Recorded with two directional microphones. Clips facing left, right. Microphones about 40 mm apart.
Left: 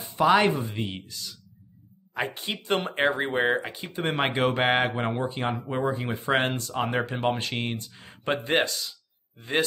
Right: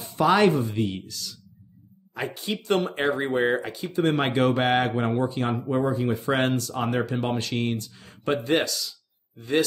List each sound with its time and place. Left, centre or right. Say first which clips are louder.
0.0 s speech: right 1 dB; centre
2.1 s speech: even; left